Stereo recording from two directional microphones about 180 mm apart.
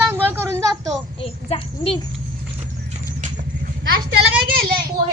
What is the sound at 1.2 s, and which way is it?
Speech, 30° left (ahead or behind).